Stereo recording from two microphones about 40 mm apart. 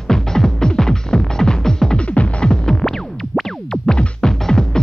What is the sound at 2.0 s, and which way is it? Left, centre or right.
Music, left.